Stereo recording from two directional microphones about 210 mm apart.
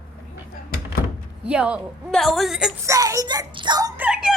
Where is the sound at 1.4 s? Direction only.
5° right (ahead or behind).